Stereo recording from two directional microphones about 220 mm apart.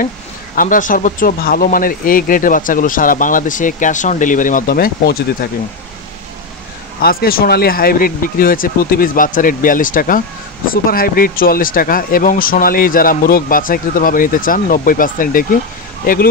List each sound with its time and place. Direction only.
0.6 s speech: 35° left (ahead or behind)
7.0 s speech: 45° left (ahead or behind)